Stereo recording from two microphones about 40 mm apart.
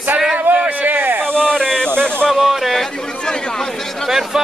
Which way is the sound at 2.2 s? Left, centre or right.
Centre.